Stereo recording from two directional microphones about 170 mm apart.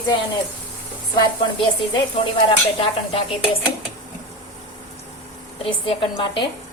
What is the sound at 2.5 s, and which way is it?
Dishes, 30° left (ahead or behind).